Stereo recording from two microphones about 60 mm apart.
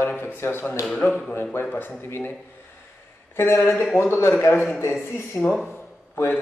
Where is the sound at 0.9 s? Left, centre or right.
Left.